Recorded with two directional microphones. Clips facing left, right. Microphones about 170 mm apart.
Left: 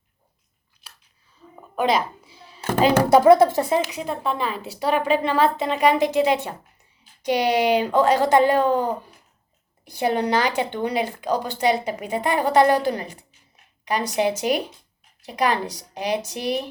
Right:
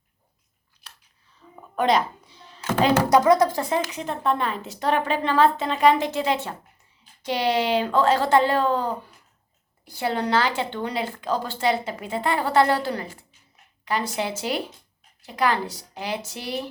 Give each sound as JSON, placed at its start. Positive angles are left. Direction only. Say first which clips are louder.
{"t": 1.7, "sound": "a sound", "louder": "even", "side_deg": 5}
{"t": 3.3, "sound": "speech", "louder": "left 4 dB", "side_deg": 25}
{"t": 3.8, "sound": "speech", "louder": "left 2 dB", "side_deg": 10}